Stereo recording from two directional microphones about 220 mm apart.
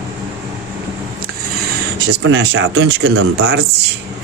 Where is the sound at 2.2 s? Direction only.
60° right (ahead or behind).